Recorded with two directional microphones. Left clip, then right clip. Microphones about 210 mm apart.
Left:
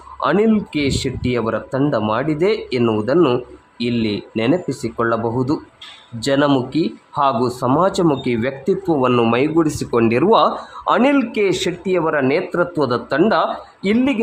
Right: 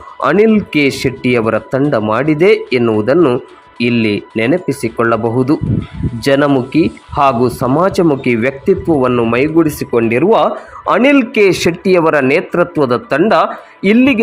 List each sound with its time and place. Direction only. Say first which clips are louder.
0.2 s speech: right 6 dB; 15° right (ahead or behind)
10.8 s a man's voice: right 5 dB; 15° right (ahead or behind)